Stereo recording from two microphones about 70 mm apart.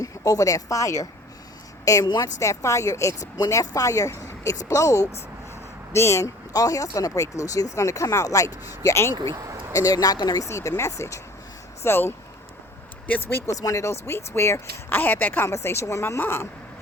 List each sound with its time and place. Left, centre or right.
0.0 s a woman's voice: left
2.0 s a woman's voice: left
2.4 s speech: left
6.5 s speech: left
9.0 s speech: left
9.3 s speech: right
9.7 s speech: left
10.4 s speech: left
13.6 s speech: left
15.4 s speech: left